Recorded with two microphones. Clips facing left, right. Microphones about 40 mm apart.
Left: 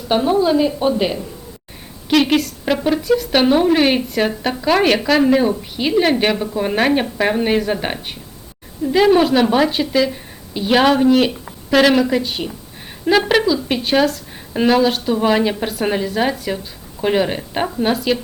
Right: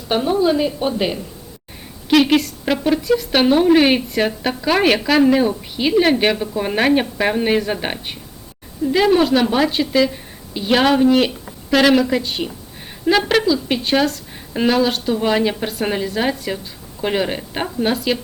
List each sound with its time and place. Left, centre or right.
0.3 s a woman's voice: centre